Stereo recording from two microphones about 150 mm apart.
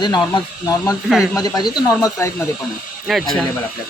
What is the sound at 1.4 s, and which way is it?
Speech, 25° left (ahead or behind).